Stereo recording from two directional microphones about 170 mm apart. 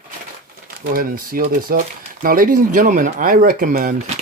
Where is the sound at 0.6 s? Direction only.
55° right (ahead or behind).